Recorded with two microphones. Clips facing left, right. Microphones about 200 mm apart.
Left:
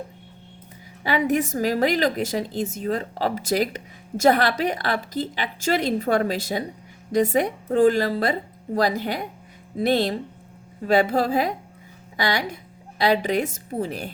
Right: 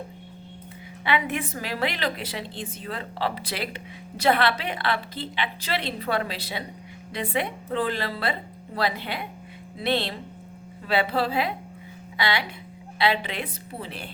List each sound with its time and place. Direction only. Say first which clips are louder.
1.0 s a woman's voice: left 5 dB; 40° left (ahead or behind)